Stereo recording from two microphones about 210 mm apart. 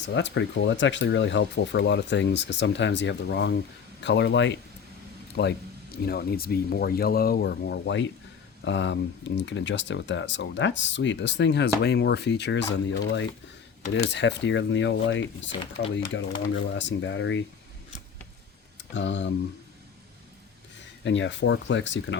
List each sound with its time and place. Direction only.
0.0 s speech: 55° left (ahead or behind)
18.8 s speech: 60° left (ahead or behind)
21.0 s speech: 60° left (ahead or behind)